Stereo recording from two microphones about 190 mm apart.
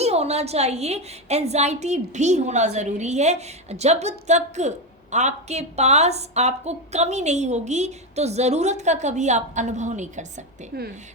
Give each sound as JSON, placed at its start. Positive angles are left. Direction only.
{"t": 0.0, "sound": "speech", "side_deg": -35}